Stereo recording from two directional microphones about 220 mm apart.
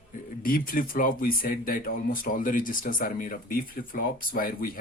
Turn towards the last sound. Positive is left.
turn(degrees=40)  # may be behind; listen again after turning